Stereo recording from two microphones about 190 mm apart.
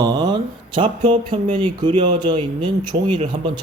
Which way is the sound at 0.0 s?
20° right (ahead or behind).